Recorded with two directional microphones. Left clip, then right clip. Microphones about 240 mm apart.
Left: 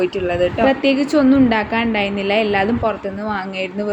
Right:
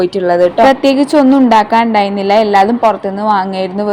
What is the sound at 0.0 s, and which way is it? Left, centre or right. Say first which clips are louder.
A woman's voice: right 8 dB; right.